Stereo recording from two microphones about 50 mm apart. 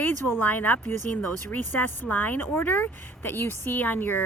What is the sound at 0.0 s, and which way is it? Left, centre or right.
Speech, left.